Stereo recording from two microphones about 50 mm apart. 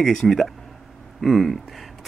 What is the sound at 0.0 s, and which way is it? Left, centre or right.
Speech, centre.